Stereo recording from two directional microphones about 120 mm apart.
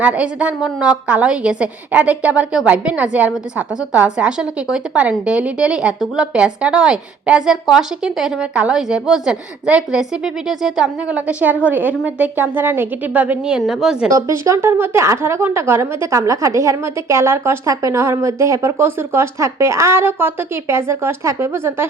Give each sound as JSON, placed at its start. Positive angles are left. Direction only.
{"t": 0.0, "sound": "a woman's voice", "side_deg": -10}
{"t": 14.1, "sound": "a woman's voice", "side_deg": -25}